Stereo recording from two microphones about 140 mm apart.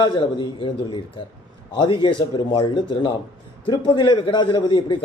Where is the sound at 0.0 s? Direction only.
35° left (ahead or behind).